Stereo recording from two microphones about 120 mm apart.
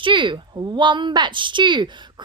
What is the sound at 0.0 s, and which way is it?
A woman's voice, 45° right (ahead or behind).